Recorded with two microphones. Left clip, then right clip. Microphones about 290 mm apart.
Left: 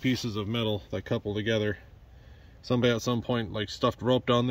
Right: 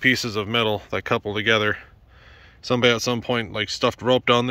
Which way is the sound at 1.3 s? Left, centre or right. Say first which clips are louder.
Right 9 dB; right.